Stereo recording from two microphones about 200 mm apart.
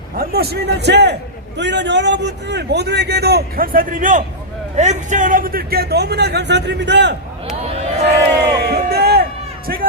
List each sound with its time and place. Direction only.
0.2 s a man's voice: 50° right (ahead or behind)
7.7 s speech: 30° right (ahead or behind)
8.5 s a sound: 55° right (ahead or behind)